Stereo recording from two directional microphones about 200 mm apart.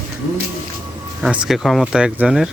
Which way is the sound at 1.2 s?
5° right (ahead or behind).